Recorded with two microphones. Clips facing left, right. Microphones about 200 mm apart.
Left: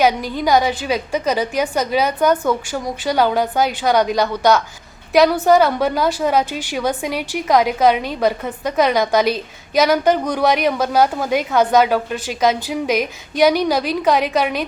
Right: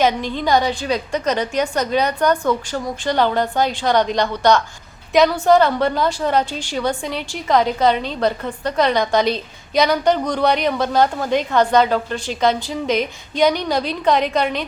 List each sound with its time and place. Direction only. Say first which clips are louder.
0.0 s a woman's voice: left 1 dB; 10° left (ahead or behind)